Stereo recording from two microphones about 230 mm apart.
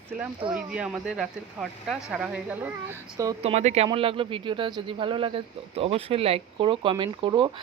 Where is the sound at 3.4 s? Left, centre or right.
Right.